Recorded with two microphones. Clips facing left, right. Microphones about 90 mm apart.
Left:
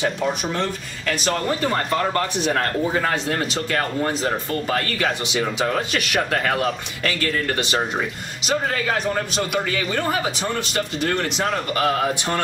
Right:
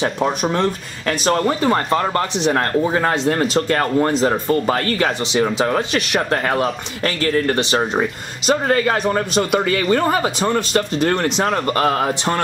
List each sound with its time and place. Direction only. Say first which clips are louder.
0.0 s speech: right 4 dB; 45° right (ahead or behind)
8.0 s speech: right 5 dB; 50° right (ahead or behind)